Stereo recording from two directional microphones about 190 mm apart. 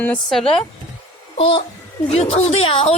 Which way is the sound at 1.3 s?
30° left (ahead or behind).